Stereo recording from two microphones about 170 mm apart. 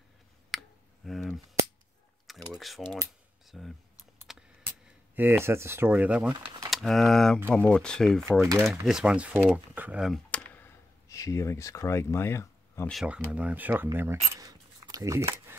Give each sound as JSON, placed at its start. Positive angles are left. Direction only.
{"t": 0.5, "sound": "clicking", "side_deg": 0}
{"t": 2.3, "sound": "a sound", "side_deg": 0}
{"t": 2.8, "sound": "speech", "side_deg": 5}
{"t": 4.3, "sound": "a sound", "side_deg": 0}
{"t": 5.1, "sound": "speech", "side_deg": -10}
{"t": 6.4, "sound": "a sound", "side_deg": -25}
{"t": 6.7, "sound": "speech", "side_deg": 0}
{"t": 8.3, "sound": "speech", "side_deg": -15}
{"t": 8.8, "sound": "speech", "side_deg": -5}
{"t": 12.9, "sound": "speech", "side_deg": -5}